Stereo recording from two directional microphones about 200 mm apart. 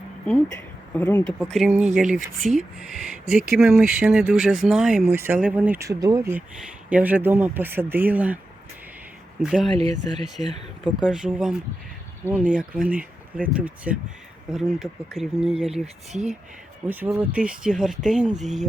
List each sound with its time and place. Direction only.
0.9 s speech: 10° left (ahead or behind)
2.0 s speech: 40° right (ahead or behind)
3.2 s speech: 5° right (ahead or behind)
9.4 s speech: 5° right (ahead or behind)
9.7 s speech: 35° right (ahead or behind)
10.8 s speech: 5° right (ahead or behind)